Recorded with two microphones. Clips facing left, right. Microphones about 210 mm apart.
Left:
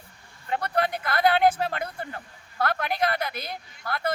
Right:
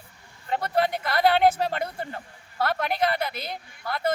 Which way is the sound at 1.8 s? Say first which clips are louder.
Right 2 dB; 25° right (ahead or behind).